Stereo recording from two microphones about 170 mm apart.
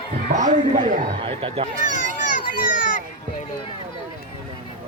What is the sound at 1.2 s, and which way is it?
Speech, 35° right (ahead or behind).